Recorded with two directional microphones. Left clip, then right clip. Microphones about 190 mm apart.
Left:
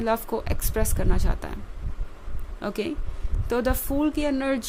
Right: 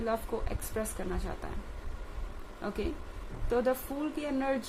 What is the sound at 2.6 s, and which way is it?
A woman's voice, 50° left (ahead or behind).